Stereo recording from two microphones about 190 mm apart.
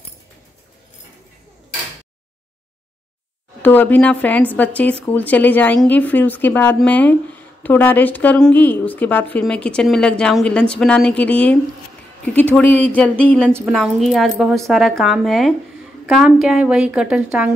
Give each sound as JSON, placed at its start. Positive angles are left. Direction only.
{"t": 3.6, "sound": "a woman's voice", "side_deg": 10}
{"t": 13.5, "sound": "a woman's voice", "side_deg": -10}
{"t": 13.7, "sound": "a woman's voice", "side_deg": 0}